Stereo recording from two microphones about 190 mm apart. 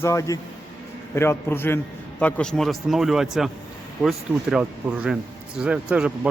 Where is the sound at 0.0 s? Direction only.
15° left (ahead or behind).